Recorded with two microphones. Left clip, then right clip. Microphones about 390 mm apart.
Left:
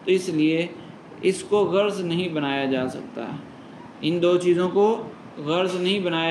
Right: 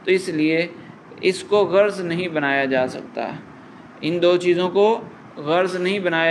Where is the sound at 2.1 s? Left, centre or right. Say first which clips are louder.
Right 3 dB; right.